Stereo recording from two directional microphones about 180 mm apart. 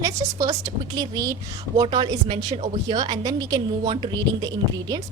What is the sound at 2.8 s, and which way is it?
A woman's voice, 20° right (ahead or behind).